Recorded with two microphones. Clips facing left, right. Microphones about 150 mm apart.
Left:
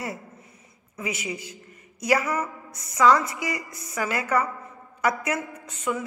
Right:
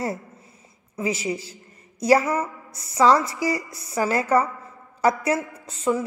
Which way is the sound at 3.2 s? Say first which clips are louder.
Right 5 dB; 20° left (ahead or behind).